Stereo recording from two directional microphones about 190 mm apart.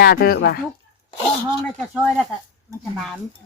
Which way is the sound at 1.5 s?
5° right (ahead or behind).